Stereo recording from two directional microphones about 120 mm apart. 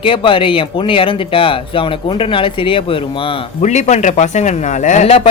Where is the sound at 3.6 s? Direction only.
75° left (ahead or behind).